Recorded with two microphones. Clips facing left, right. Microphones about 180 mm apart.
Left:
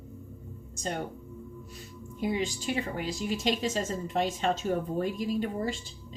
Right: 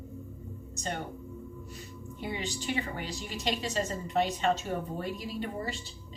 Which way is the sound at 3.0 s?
45° left (ahead or behind).